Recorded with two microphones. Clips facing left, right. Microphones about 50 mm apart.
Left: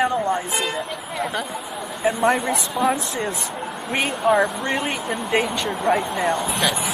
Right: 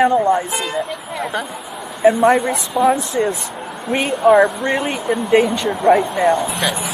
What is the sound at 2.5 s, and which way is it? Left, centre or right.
Speech, centre.